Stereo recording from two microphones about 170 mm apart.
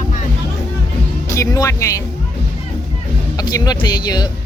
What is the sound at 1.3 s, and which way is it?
Music, 20° left (ahead or behind).